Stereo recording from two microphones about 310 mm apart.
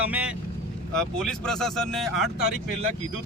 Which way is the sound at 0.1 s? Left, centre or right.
Centre.